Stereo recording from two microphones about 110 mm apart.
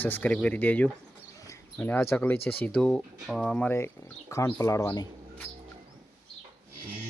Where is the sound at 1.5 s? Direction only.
20° left (ahead or behind).